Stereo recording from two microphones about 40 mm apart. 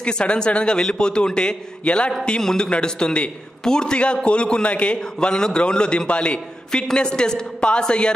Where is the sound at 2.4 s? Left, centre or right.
Centre.